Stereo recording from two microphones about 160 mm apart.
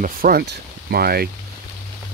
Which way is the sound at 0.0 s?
70° right (ahead or behind).